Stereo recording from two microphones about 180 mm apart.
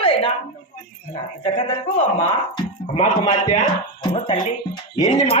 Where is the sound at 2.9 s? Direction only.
35° left (ahead or behind).